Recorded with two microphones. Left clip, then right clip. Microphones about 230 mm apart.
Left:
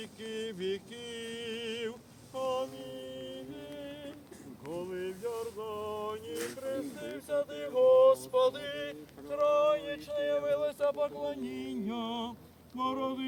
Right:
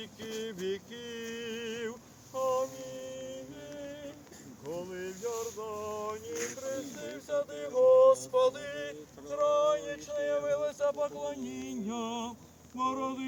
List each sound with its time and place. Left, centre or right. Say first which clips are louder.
0.0 s a sound: even; left
2.4 s mantra: right 3 dB; centre
4.7 s music: left 1 dB; centre
12.7 s speech: right 1 dB; centre